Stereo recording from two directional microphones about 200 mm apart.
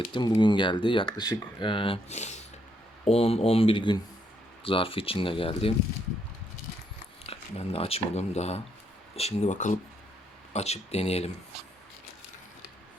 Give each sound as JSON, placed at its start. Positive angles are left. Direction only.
{"t": 0.1, "sound": "speech", "side_deg": 20}
{"t": 7.3, "sound": "speech", "side_deg": 30}